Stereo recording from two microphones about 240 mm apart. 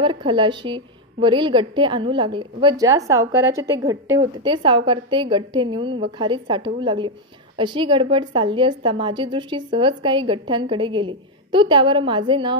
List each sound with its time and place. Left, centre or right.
0.0 s a woman's voice: right